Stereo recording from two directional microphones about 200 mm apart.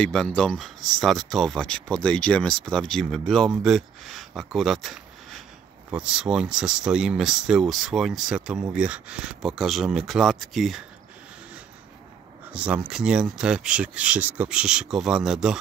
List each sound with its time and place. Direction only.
0.0 s speech: 5° left (ahead or behind)
12.5 s speech: 5° right (ahead or behind)